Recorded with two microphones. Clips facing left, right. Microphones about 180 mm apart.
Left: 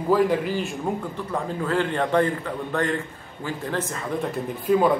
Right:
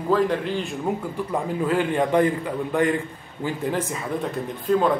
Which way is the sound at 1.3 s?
15° right (ahead or behind).